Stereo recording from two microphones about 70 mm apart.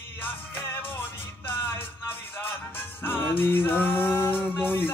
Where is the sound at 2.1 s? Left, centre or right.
Left.